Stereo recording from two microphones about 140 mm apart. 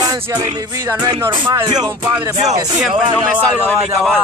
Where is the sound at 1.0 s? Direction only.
25° right (ahead or behind).